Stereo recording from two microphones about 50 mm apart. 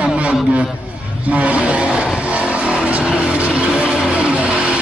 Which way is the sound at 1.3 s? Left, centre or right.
Right.